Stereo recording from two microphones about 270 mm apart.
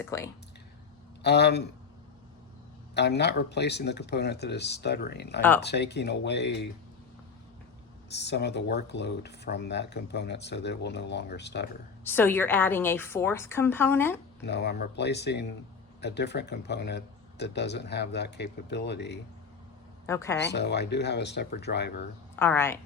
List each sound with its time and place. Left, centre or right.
0.0 s a woman's voice: centre
1.2 s speech: left
2.9 s speech: left
5.4 s a woman's voice: centre
5.6 s speech: left
8.1 s speech: left
12.0 s a woman's voice: centre
14.4 s speech: left
20.1 s a woman's voice: centre
20.5 s speech: left
22.4 s a woman's voice: centre